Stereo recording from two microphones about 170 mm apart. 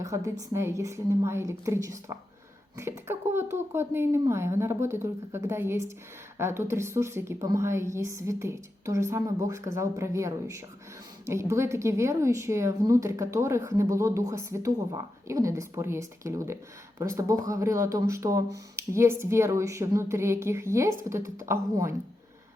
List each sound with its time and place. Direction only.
0.0 s a woman's voice: 15° right (ahead or behind)